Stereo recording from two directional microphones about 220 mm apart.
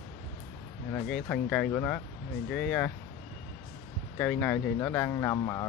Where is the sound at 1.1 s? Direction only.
5° left (ahead or behind).